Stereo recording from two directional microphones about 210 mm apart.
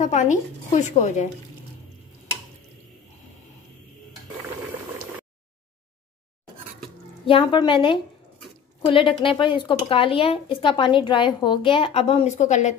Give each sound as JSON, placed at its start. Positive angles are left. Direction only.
{"t": 0.0, "sound": "speech", "side_deg": 35}
{"t": 7.2, "sound": "a woman's voice", "side_deg": 25}